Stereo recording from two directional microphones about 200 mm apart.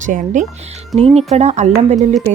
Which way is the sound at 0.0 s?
40° right (ahead or behind).